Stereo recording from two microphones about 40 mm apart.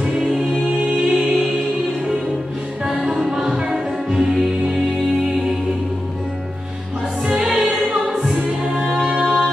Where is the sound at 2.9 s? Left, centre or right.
Centre.